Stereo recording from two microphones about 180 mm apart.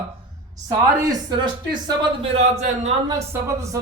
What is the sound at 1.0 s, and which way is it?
Speech, 20° right (ahead or behind).